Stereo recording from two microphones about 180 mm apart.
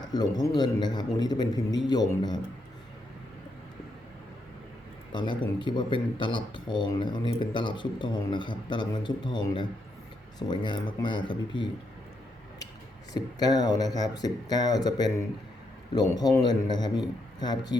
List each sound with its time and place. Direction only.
0.0 s speech: 20° left (ahead or behind)
5.1 s speech: 25° left (ahead or behind)
13.1 s speech: 20° left (ahead or behind)